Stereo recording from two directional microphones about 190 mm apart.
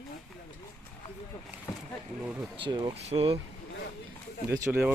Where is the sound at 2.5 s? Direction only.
25° right (ahead or behind).